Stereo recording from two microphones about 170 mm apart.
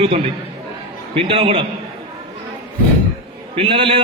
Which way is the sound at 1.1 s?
35° right (ahead or behind).